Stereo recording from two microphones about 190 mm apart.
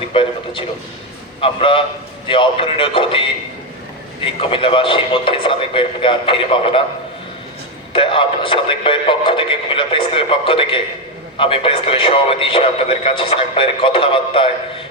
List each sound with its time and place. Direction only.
0.1 s speech: 30° left (ahead or behind)
7.9 s speech: 25° left (ahead or behind)